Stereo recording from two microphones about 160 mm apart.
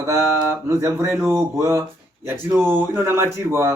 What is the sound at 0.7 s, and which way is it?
Speech, 20° right (ahead or behind).